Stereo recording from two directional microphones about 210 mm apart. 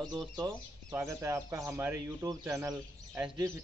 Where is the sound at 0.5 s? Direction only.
15° right (ahead or behind).